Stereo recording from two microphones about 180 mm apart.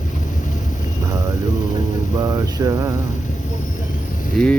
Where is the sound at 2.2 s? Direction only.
20° right (ahead or behind).